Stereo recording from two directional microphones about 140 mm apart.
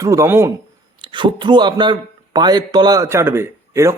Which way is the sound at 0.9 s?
35° right (ahead or behind).